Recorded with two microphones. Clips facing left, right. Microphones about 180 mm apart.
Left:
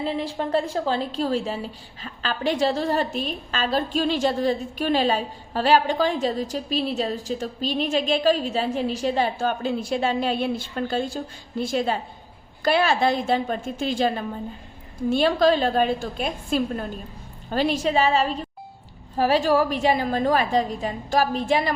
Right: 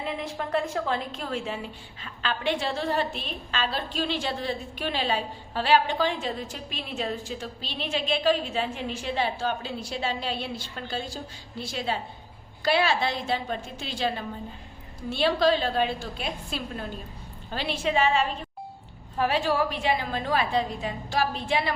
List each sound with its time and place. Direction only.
0.0 s a woman's voice: 35° left (ahead or behind)